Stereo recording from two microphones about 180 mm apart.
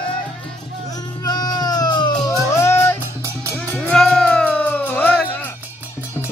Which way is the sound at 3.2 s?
15° right (ahead or behind).